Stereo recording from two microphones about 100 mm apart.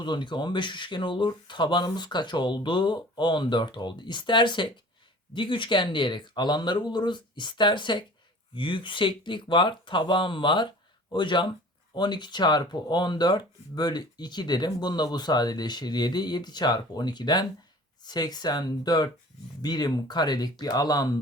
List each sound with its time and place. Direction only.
0.0 s speech: 50° left (ahead or behind)